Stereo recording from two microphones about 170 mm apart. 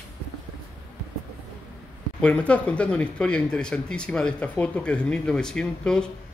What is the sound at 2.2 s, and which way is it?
A man's voice, 5° left (ahead or behind).